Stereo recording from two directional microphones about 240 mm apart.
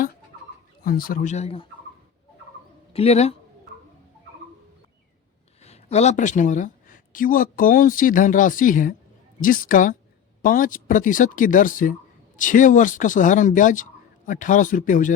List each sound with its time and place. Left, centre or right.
0.9 s speech: left
2.9 s speech: left
5.6 s speech: left